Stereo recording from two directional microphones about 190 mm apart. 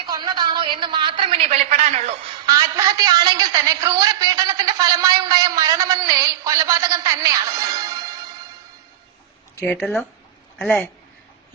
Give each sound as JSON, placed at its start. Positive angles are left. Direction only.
{"t": 0.1, "sound": "a woman's voice", "side_deg": -25}
{"t": 2.5, "sound": "a woman's voice", "side_deg": -20}
{"t": 9.6, "sound": "speech", "side_deg": 10}
{"t": 9.8, "sound": "speech", "side_deg": 0}